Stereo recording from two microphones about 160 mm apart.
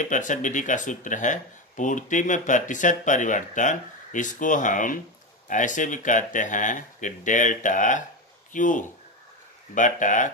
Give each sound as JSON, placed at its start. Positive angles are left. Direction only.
{"t": 0.0, "sound": "speech", "side_deg": 50}